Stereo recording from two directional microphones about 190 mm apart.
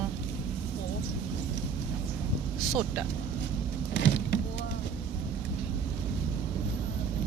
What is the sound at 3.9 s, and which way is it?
Vehicle, 65° left (ahead or behind).